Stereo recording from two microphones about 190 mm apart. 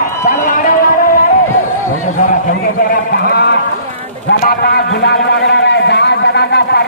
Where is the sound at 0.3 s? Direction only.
45° left (ahead or behind).